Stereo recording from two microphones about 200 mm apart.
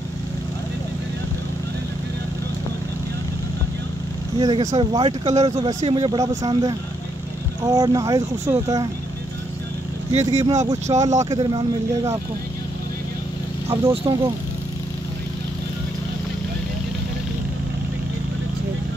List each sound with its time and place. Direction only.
4.4 s speech: 20° right (ahead or behind)
10.1 s speech: 15° right (ahead or behind)
14.0 s speech: 20° right (ahead or behind)